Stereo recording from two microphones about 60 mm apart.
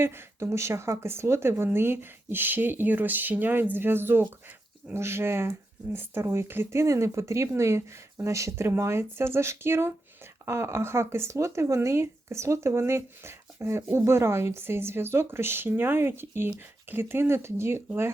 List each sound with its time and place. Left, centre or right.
0.0 s a woman's voice: right
6.8 s a woman's voice: right